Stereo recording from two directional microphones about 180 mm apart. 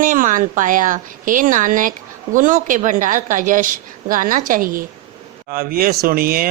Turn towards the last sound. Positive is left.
turn(degrees=-55)  # may be behind; listen again after turning